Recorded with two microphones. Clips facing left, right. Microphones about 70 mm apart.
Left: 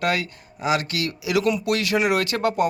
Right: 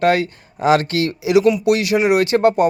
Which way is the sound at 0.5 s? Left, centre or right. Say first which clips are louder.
Right 8 dB; right.